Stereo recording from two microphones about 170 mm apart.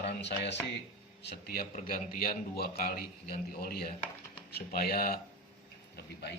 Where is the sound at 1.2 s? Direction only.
75° left (ahead or behind).